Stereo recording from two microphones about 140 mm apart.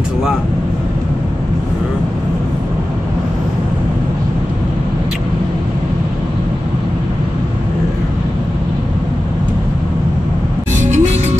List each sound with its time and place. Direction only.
10.8 s music: 55° right (ahead or behind)